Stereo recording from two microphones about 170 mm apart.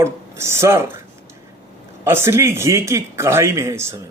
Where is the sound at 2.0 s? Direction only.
15° right (ahead or behind).